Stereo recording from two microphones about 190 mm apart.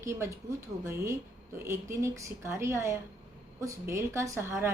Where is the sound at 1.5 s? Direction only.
15° right (ahead or behind).